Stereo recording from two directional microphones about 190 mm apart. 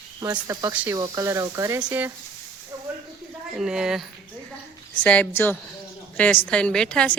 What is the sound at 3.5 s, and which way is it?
Speech, 5° right (ahead or behind).